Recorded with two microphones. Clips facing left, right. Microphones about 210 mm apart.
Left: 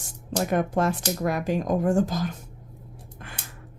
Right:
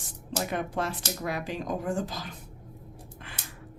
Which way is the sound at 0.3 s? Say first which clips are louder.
Left 7 dB; 45° left (ahead or behind).